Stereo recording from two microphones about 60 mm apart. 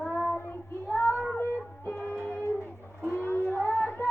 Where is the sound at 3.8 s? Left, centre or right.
Left.